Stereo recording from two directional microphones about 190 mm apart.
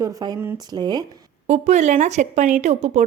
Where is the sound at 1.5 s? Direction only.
35° right (ahead or behind).